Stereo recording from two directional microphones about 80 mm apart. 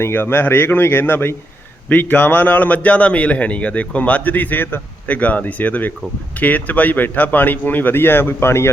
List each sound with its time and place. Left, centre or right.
0.0 s a man's voice: left